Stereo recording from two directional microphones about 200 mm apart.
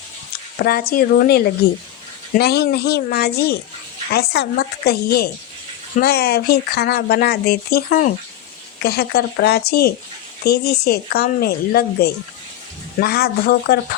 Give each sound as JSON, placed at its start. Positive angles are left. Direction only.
{"t": 0.6, "sound": "speech", "side_deg": 50}
{"t": 2.4, "sound": "speech", "side_deg": 55}